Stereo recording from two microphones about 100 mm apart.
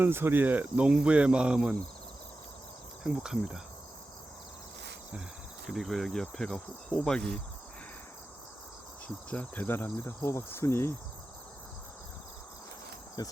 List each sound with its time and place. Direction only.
0.0 s cricket: 20° right (ahead or behind)
3.0 s cricket: 5° right (ahead or behind)
5.6 s cricket: centre (ahead or behind)
9.0 s insect: 15° left (ahead or behind)
13.2 s cricket: 40° left (ahead or behind)